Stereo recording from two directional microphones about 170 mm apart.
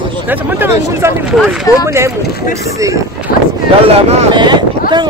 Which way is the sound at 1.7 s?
20° left (ahead or behind).